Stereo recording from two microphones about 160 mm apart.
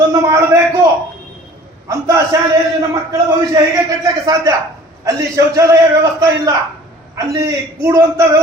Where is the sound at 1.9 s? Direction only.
20° right (ahead or behind).